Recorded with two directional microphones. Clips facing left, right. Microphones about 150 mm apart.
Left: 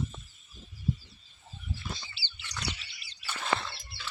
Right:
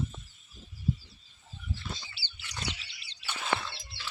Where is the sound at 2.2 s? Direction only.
55° right (ahead or behind).